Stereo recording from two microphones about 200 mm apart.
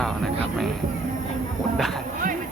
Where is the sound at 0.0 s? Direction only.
Centre (ahead or behind).